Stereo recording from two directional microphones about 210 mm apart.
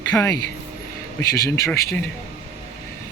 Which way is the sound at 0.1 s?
15° left (ahead or behind).